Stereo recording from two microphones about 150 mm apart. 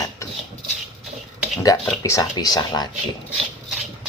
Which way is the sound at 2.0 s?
25° left (ahead or behind).